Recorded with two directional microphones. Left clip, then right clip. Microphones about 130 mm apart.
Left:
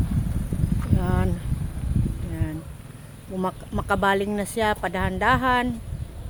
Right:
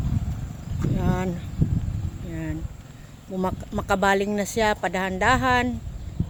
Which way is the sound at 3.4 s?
40° right (ahead or behind).